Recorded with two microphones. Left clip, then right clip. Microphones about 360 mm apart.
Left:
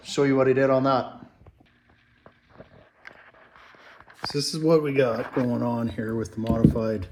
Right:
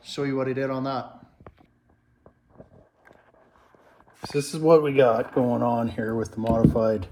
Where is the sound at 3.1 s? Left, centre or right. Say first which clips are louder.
Left 9 dB; right.